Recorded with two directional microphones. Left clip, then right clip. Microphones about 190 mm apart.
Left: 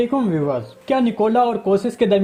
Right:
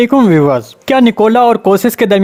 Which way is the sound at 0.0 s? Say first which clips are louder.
Right 11 dB; 50° right (ahead or behind).